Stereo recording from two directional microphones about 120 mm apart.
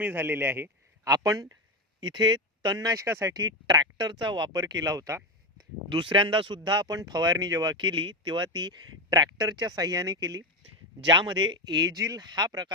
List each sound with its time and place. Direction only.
0.0 s a man's voice: 20° right (ahead or behind)
1.0 s speech: 30° right (ahead or behind)
5.9 s speech: 45° right (ahead or behind)